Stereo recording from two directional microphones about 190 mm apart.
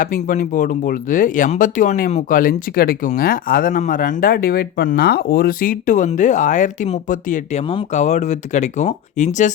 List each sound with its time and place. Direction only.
0.0 s speech: 45° left (ahead or behind)